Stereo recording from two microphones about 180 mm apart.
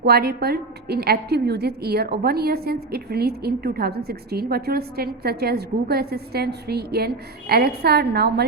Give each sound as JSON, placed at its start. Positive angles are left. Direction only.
{"t": 0.0, "sound": "a woman's voice", "side_deg": -60}